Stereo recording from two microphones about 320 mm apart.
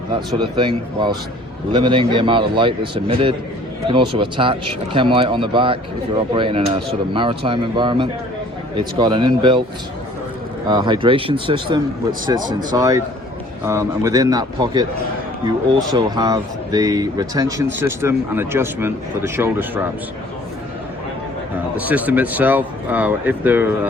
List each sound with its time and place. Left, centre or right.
0.3 s speech: centre
10.7 s speech: centre
15.9 s speech: centre
21.8 s speech: centre